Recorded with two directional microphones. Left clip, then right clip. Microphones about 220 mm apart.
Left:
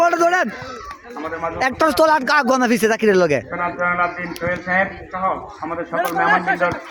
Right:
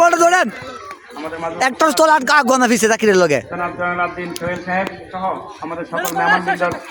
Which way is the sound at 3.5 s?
40° right (ahead or behind).